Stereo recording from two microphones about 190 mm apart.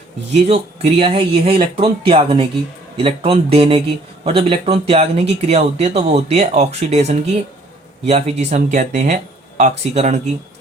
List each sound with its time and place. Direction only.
0.4 s speech: 30° right (ahead or behind)